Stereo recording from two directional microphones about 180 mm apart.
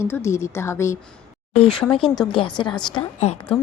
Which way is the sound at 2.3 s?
25° left (ahead or behind).